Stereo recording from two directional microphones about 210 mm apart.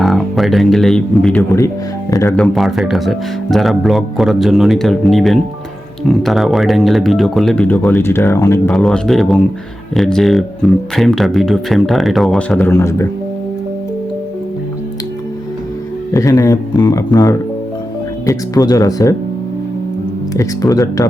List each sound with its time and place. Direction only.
0.0 s speech: centre (ahead or behind); by 2.3 s 15° left (ahead or behind)
2.3 s speech: centre (ahead or behind)
8.7 s speech: centre (ahead or behind)
16.1 s speech: 15° left (ahead or behind)
20.3 s speech: 15° left (ahead or behind)